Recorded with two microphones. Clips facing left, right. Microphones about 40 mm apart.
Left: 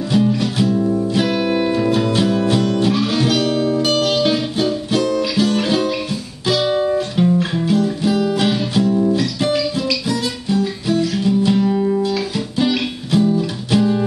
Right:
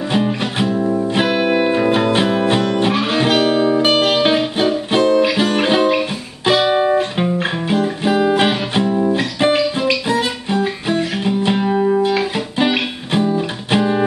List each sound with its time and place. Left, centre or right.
0.1 s music: right